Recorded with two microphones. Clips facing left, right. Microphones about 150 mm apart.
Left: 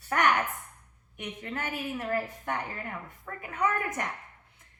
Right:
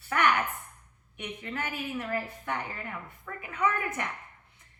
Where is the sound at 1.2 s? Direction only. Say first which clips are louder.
Even; 45° left (ahead or behind).